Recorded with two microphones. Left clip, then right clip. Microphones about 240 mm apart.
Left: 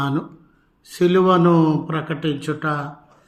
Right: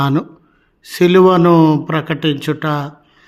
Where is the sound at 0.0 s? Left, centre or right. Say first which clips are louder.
Right 7 dB; right.